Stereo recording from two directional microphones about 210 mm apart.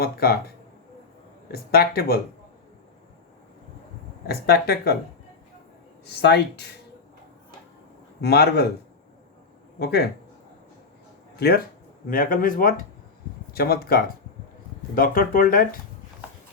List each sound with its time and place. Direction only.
0.0 s speech: 45° left (ahead or behind)
1.5 s speech: 45° left (ahead or behind)
4.3 s speech: 50° left (ahead or behind)
6.2 s speech: 50° left (ahead or behind)
8.2 s speech: 50° left (ahead or behind)
9.7 s speech: 50° left (ahead or behind)
11.3 s speech: 45° left (ahead or behind)